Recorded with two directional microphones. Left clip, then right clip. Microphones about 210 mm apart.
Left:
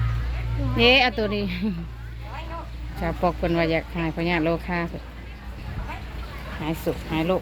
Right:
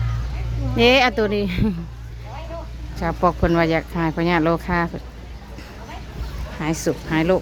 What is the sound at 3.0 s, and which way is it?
Speech, 10° right (ahead or behind).